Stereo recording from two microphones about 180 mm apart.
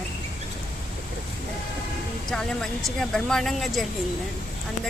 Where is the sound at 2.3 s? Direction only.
5° left (ahead or behind).